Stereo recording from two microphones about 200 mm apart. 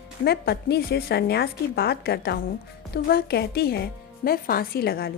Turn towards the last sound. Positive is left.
turn(degrees=50)  # may be behind; listen again after turning